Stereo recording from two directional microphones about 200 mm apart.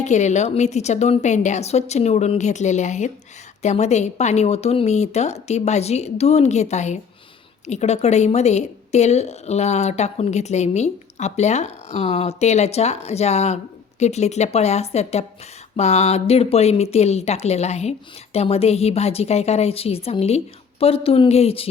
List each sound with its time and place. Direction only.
0.0 s a woman's voice: 35° left (ahead or behind)